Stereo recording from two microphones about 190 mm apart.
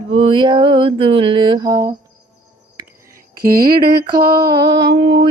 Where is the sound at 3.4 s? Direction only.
50° right (ahead or behind).